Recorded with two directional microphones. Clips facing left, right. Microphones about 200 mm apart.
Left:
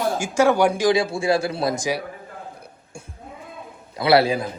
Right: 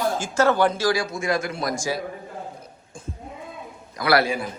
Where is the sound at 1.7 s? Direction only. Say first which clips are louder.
Left 2 dB; 15° left (ahead or behind).